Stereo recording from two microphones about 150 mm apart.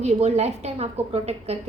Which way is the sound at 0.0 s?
45° right (ahead or behind).